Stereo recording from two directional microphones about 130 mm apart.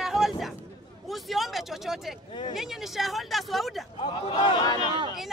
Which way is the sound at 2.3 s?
40° left (ahead or behind).